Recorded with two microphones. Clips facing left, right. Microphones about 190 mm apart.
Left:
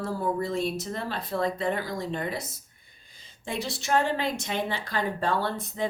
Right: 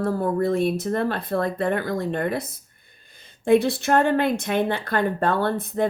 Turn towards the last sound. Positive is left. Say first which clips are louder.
# right 7 dB
turn(degrees=-55)  # may be behind; listen again after turning